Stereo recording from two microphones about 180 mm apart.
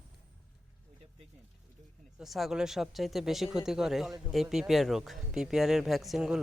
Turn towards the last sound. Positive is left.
turn(degrees=0)  # may be behind; listen again after turning